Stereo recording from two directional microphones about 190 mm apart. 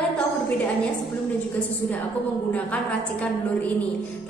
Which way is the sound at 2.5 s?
5° left (ahead or behind).